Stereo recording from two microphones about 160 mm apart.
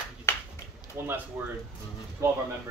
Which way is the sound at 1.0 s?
15° right (ahead or behind).